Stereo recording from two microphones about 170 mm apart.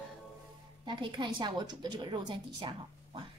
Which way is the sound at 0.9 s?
25° right (ahead or behind).